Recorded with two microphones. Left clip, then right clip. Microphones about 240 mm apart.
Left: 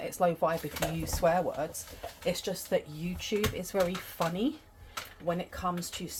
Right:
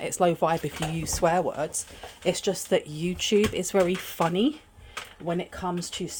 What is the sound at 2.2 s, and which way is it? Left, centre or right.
Speech, right.